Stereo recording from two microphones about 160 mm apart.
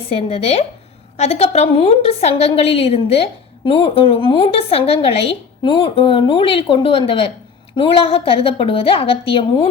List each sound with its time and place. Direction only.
0.1 s a woman's voice: 35° left (ahead or behind)